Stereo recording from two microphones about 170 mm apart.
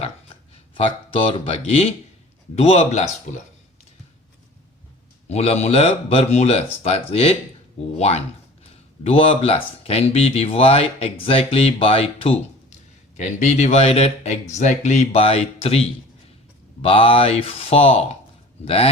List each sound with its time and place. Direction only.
0.7 s speech: 30° left (ahead or behind)
5.3 s speech: 40° left (ahead or behind)